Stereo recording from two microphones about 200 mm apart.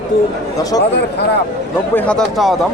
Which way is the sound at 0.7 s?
20° left (ahead or behind).